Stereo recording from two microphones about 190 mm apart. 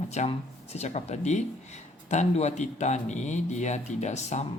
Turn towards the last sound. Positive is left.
turn(degrees=35)  # may be behind; listen again after turning